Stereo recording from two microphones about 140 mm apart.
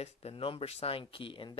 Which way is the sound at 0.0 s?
45° left (ahead or behind).